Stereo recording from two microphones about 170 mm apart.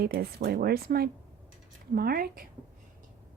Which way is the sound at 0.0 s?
65° right (ahead or behind).